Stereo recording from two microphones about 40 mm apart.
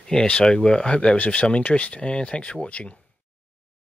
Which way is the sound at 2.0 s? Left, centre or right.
Left.